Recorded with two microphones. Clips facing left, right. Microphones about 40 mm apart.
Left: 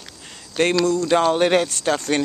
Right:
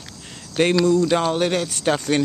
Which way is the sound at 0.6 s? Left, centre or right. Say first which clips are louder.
Right 2 dB; centre.